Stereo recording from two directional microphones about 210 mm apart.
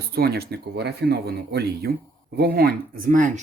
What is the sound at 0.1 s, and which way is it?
Speech, 50° right (ahead or behind).